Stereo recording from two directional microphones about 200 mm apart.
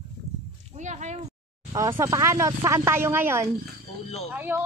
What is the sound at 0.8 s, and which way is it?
Speech, 35° right (ahead or behind).